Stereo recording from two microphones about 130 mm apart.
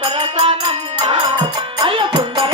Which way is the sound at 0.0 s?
35° right (ahead or behind).